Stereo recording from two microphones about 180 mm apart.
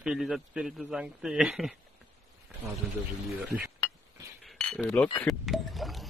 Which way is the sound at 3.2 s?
Centre (ahead or behind).